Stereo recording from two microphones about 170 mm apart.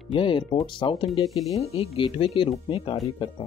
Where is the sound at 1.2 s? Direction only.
Centre (ahead or behind).